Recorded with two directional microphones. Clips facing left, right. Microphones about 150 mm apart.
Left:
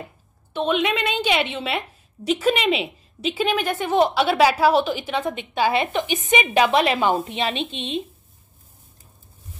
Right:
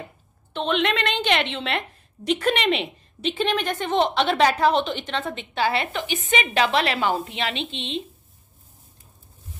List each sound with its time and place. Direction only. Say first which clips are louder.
0.5 s a woman's voice: left 2 dB; 10° left (ahead or behind)